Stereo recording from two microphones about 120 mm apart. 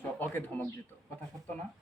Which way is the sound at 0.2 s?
15° left (ahead or behind).